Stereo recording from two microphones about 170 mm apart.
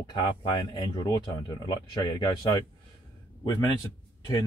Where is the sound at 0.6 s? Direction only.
25° left (ahead or behind).